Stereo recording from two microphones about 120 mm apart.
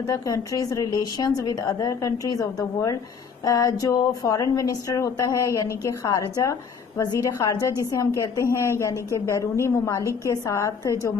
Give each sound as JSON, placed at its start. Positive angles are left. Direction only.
{"t": 0.0, "sound": "speech", "side_deg": 25}
{"t": 8.9, "sound": "speech", "side_deg": -25}
{"t": 9.3, "sound": "speech", "side_deg": 25}